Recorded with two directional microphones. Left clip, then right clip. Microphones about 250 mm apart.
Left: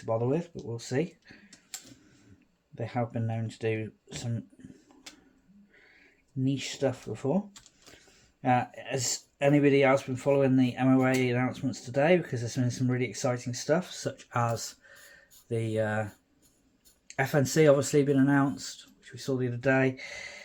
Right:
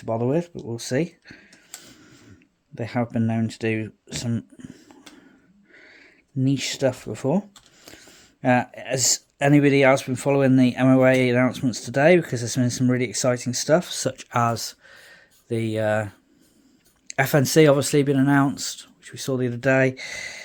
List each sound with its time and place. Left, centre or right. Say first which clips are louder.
0.0 s speech: right 5 dB; right
2.7 s speech: right 7 dB; right
17.1 s speech: right 7 dB; right